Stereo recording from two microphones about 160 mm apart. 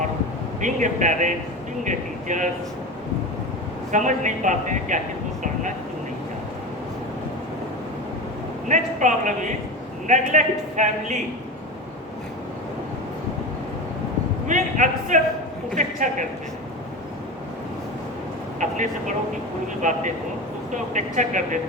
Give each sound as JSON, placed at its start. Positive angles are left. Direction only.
{"t": 0.6, "sound": "speech", "side_deg": -50}
{"t": 3.9, "sound": "speech", "side_deg": -50}
{"t": 8.6, "sound": "speech", "side_deg": -50}
{"t": 14.4, "sound": "speech", "side_deg": -50}
{"t": 18.6, "sound": "speech", "side_deg": -50}
{"t": 20.9, "sound": "speech", "side_deg": -50}